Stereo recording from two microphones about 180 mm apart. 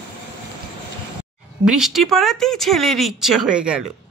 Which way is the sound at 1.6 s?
5° right (ahead or behind).